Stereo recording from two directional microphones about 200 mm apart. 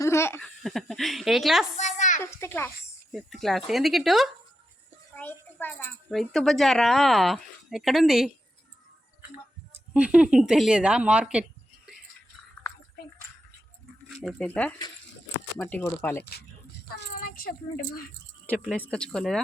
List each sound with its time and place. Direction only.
0.0 s laughter: 15° left (ahead or behind)
0.6 s speech: centre (ahead or behind)
1.7 s a sound: 35° left (ahead or behind)
2.2 s a child's voice: 10° left (ahead or behind)
3.1 s a child's voice: centre (ahead or behind)
9.7 s speech: 5° right (ahead or behind)
14.1 s a child's voice: centre (ahead or behind)
17.0 s a woman's voice: 45° left (ahead or behind)
18.4 s speech: 5° left (ahead or behind)